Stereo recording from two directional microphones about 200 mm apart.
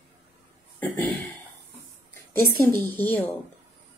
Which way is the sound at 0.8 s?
10° left (ahead or behind).